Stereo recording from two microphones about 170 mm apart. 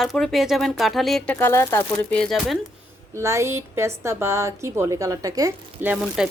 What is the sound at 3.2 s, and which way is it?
A woman's voice, 15° right (ahead or behind).